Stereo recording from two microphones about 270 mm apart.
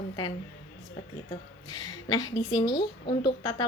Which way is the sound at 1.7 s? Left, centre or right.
Centre.